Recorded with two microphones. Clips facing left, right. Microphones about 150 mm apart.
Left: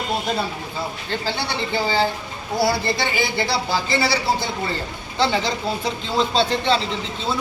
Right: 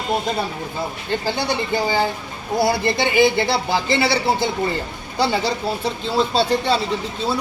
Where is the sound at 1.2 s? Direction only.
15° right (ahead or behind).